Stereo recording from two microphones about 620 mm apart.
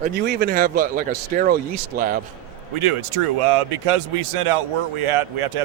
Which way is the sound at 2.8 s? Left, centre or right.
Right.